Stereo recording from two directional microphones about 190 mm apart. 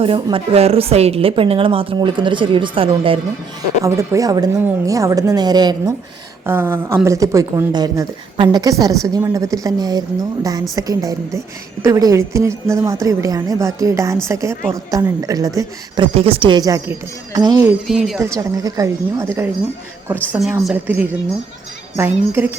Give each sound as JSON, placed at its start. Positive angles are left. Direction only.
{"t": 0.0, "sound": "a woman's voice", "side_deg": -30}
{"t": 3.8, "sound": "a woman's voice", "side_deg": -15}
{"t": 16.1, "sound": "a woman's voice", "side_deg": -30}
{"t": 17.8, "sound": "speech", "side_deg": 0}
{"t": 18.2, "sound": "a woman's voice", "side_deg": -15}